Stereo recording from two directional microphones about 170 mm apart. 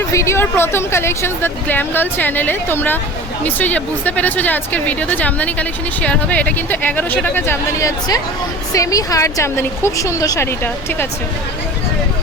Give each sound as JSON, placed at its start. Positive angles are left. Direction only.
{"t": 0.1, "sound": "a woman's voice", "side_deg": 15}